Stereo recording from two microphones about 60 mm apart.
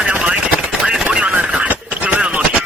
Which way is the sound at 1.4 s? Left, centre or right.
Centre.